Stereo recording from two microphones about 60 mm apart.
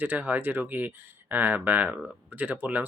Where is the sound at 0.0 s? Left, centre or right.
Right.